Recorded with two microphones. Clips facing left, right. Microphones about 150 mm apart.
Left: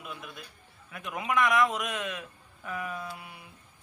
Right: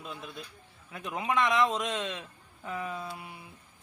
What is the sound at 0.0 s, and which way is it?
A man's voice, 30° right (ahead or behind).